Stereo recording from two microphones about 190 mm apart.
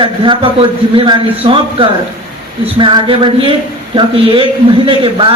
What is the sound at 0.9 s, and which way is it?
A man's voice, 25° right (ahead or behind).